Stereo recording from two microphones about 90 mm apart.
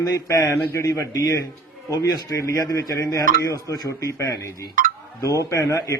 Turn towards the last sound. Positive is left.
turn(degrees=35)  # may be behind; listen again after turning